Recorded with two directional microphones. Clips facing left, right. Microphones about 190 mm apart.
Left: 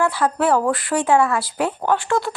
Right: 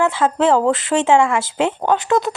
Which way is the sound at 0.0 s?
25° right (ahead or behind).